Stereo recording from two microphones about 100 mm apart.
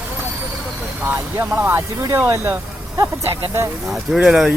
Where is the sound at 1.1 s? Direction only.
20° right (ahead or behind).